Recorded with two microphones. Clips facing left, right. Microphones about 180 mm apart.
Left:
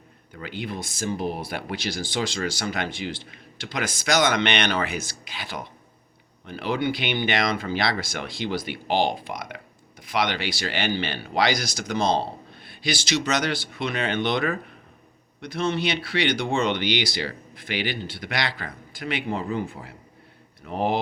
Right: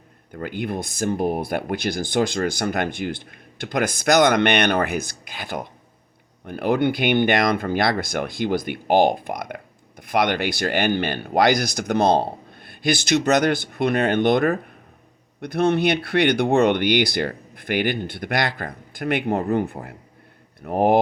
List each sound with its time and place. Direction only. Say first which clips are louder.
0.3 s speech: right 6 dB; 50° right (ahead or behind)